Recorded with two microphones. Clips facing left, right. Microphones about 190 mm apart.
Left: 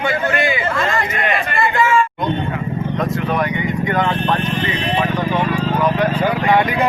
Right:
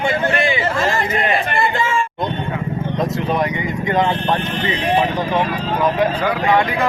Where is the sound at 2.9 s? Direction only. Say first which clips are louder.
Right 1 dB; 20° right (ahead or behind).